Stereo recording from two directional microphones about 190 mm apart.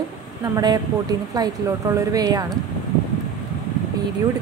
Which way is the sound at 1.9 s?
20° right (ahead or behind).